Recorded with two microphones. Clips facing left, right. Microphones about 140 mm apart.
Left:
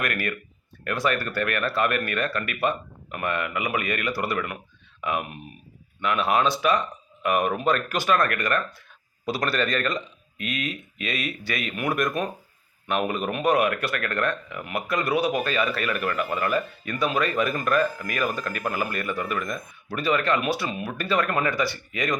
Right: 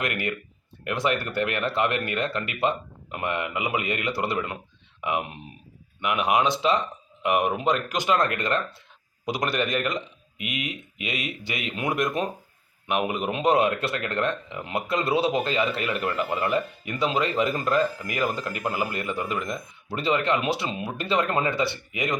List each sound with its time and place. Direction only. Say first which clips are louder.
0.0 s speech: even; 20° right (ahead or behind)